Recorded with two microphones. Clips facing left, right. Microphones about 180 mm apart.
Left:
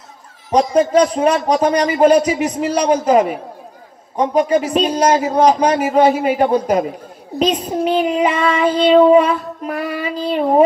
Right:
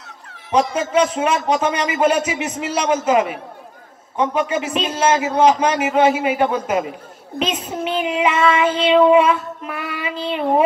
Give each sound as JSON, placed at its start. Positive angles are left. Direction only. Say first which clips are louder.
{"t": 0.7, "sound": "child singing", "louder": "left 5 dB", "side_deg": 35}